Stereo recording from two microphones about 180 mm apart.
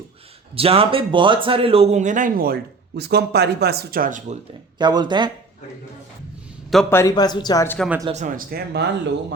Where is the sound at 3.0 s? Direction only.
65° right (ahead or behind); by 4.3 s 45° right (ahead or behind).